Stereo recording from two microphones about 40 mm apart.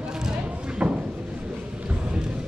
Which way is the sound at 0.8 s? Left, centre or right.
Right.